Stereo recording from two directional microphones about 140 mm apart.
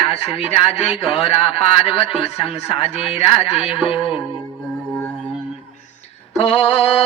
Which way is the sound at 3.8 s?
40° left (ahead or behind).